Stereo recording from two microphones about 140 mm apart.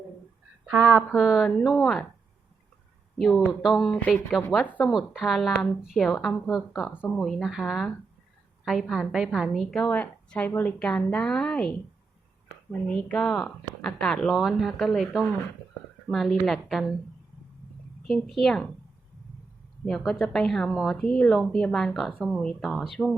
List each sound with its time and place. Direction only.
0.8 s speech: 20° right (ahead or behind)
1.1 s a woman's voice: 5° right (ahead or behind)
3.2 s a woman's voice: centre (ahead or behind)
4.6 s speech: 10° left (ahead or behind)
4.9 s a woman's voice: centre (ahead or behind)
6.8 s a woman's voice: 10° right (ahead or behind)
12.9 s a woman's voice: 5° left (ahead or behind)
18.0 s a woman's voice: centre (ahead or behind)
19.8 s a woman's voice: centre (ahead or behind)